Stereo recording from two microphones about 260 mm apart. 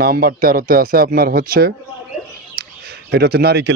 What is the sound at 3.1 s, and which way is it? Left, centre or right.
Speech, right.